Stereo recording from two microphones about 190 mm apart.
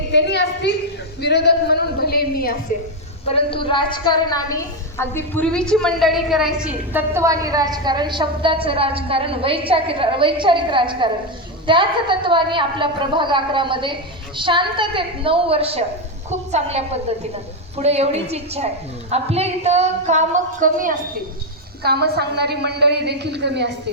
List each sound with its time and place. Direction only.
0.1 s a woman's voice: 65° left (ahead or behind)
3.2 s a woman's voice: 30° left (ahead or behind); by 21.0 s 45° right (ahead or behind)
21.8 s a woman's voice: 60° right (ahead or behind)